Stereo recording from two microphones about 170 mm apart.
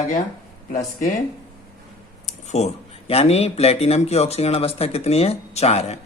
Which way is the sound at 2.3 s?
40° left (ahead or behind).